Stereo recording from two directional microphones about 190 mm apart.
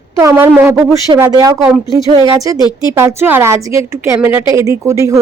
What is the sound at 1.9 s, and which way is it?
A woman's voice, 20° right (ahead or behind).